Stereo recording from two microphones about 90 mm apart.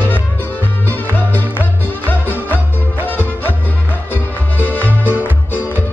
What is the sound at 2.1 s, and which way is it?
Music, 20° left (ahead or behind).